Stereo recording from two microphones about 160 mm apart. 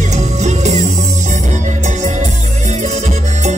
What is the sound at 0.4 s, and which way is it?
Music, 45° right (ahead or behind).